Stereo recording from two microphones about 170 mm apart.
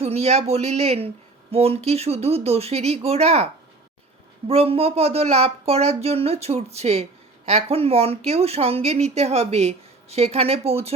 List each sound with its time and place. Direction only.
0.0 s a woman's voice: 40° right (ahead or behind)
4.4 s a woman's voice: 35° right (ahead or behind)